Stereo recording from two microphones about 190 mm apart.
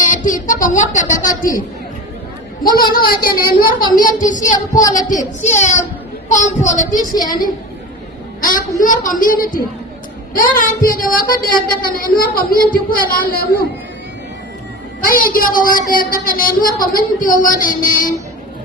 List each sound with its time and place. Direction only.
0.0 s speech: 45° left (ahead or behind)
2.7 s a woman's voice: 50° left (ahead or behind)
8.4 s a woman's voice: 45° left (ahead or behind)
15.0 s a woman's voice: 50° left (ahead or behind)